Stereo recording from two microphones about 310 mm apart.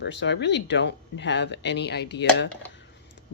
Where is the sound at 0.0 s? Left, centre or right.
Left.